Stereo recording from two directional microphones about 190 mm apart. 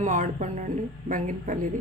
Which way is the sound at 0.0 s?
40° right (ahead or behind).